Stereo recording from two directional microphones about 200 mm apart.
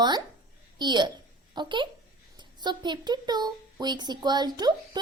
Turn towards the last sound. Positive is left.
turn(degrees=-20)  # may be behind; listen again after turning